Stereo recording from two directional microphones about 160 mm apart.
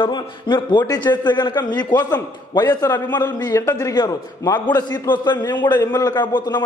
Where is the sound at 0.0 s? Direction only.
30° left (ahead or behind).